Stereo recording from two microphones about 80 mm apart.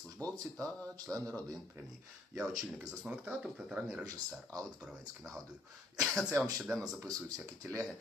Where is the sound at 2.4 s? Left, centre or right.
Centre.